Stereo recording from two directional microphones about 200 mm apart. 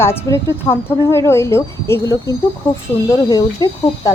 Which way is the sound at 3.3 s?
20° left (ahead or behind).